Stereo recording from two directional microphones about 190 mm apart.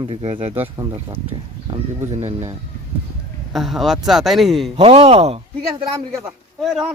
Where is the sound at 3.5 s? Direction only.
Centre (ahead or behind).